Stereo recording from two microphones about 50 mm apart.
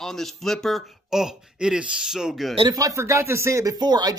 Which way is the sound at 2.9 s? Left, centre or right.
Right.